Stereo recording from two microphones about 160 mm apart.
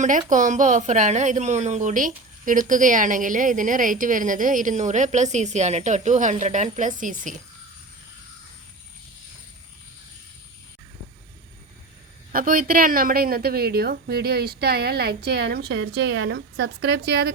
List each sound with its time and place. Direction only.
0.0 s a woman's voice: 50° right (ahead or behind)
12.3 s a woman's voice: 60° right (ahead or behind); by 17.3 s 90° right